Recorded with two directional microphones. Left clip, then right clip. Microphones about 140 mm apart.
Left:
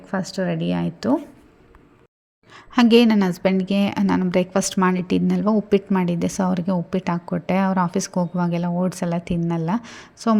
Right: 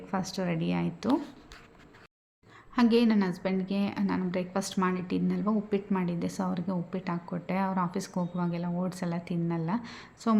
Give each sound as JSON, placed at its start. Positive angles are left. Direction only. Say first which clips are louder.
{"t": 0.1, "sound": "a woman's voice", "louder": "left 8 dB", "side_deg": 30}
{"t": 2.7, "sound": "a woman's voice", "louder": "left 10 dB", "side_deg": 60}